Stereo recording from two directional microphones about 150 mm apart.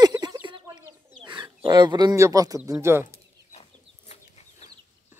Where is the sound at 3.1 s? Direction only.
45° left (ahead or behind).